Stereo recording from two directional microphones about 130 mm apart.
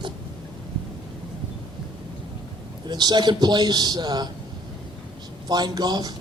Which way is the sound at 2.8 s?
35° right (ahead or behind).